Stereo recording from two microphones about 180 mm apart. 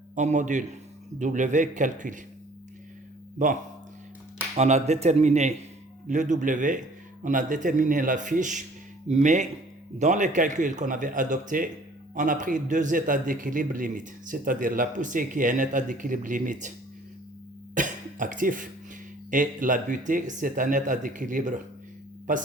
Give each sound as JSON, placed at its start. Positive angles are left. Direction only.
{"t": 0.2, "sound": "a man's voice", "side_deg": -40}
{"t": 3.3, "sound": "a man's voice", "side_deg": -45}
{"t": 17.7, "sound": "cough", "side_deg": -45}
{"t": 19.3, "sound": "a man's voice", "side_deg": -45}